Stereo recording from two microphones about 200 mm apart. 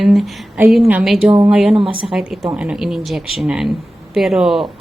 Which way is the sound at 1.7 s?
25° right (ahead or behind).